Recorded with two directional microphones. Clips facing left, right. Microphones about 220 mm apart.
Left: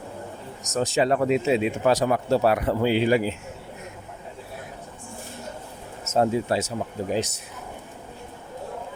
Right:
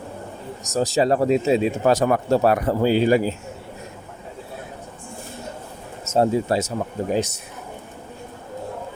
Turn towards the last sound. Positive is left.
turn(degrees=-50)  # may be behind; listen again after turning